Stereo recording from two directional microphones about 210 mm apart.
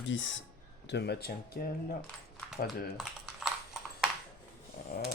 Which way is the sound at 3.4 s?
5° right (ahead or behind).